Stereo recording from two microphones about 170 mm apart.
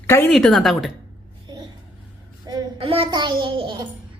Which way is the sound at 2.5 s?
30° right (ahead or behind).